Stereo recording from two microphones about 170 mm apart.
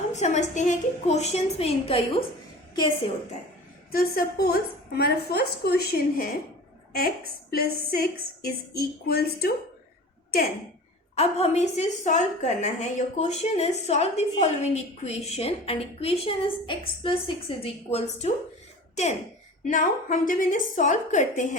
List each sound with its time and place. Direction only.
0.1 s a woman's voice: 45° left (ahead or behind)
3.9 s a woman's voice: 60° left (ahead or behind)
11.1 s a woman's voice: 40° left (ahead or behind)
19.6 s a woman's voice: 50° left (ahead or behind)